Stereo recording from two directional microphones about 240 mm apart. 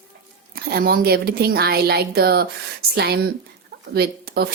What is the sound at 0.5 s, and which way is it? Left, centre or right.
Speech, right.